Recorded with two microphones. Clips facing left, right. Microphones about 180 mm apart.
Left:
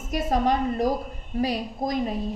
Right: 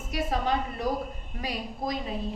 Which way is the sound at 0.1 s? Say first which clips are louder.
Left 5 dB; 45° left (ahead or behind).